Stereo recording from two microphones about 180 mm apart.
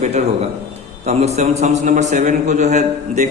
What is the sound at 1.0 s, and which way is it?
A man's voice, 40° right (ahead or behind).